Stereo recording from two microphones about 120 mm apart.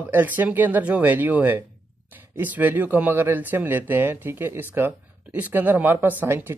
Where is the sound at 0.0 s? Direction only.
15° right (ahead or behind).